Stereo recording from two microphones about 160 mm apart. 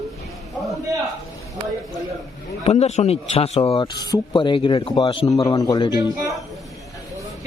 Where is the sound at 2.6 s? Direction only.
40° left (ahead or behind).